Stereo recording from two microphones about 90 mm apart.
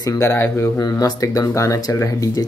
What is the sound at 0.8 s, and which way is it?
Speech, 45° left (ahead or behind).